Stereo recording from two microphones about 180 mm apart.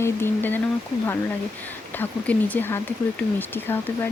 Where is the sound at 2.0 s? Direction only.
10° left (ahead or behind).